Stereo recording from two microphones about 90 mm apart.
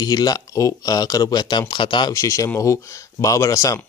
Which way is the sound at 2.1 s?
40° left (ahead or behind).